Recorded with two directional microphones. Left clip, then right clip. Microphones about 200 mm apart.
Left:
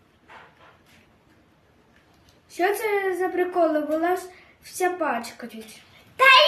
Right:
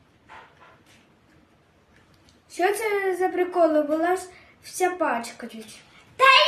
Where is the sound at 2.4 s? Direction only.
10° right (ahead or behind).